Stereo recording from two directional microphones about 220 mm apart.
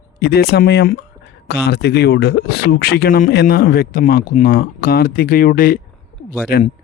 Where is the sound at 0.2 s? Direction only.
45° left (ahead or behind).